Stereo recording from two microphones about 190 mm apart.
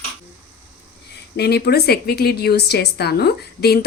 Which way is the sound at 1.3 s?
60° left (ahead or behind).